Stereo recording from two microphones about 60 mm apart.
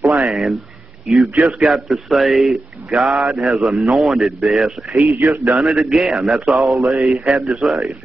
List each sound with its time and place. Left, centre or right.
0.2 s a man's voice: centre
5.0 s a man's voice: right
5.6 s speech: centre